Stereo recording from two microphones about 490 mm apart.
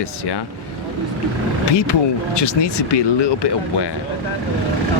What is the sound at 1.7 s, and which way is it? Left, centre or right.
Speech, left.